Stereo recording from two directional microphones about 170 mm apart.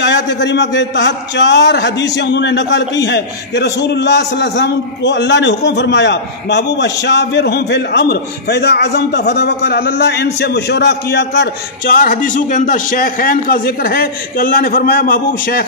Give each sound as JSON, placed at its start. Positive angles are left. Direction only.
{"t": 0.0, "sound": "a man's voice", "side_deg": 90}